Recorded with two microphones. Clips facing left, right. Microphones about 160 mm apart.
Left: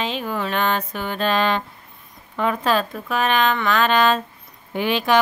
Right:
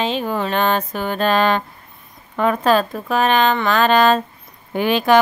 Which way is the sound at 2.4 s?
45° right (ahead or behind).